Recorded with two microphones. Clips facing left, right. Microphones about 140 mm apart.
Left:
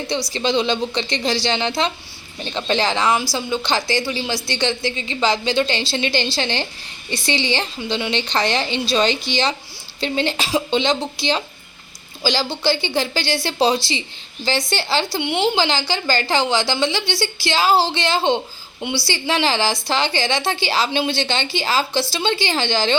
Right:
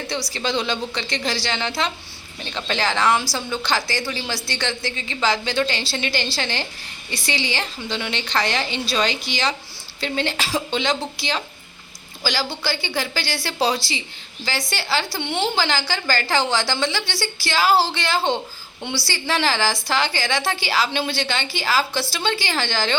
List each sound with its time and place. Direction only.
0.1 s a woman's voice: 20° left (ahead or behind)